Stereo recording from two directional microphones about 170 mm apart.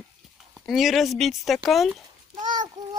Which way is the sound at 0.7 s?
Centre (ahead or behind).